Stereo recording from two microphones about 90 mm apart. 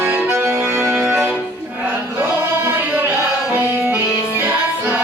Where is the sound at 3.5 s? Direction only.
25° right (ahead or behind).